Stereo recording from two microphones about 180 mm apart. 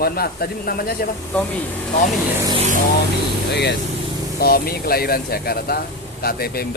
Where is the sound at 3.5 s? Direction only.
65° left (ahead or behind).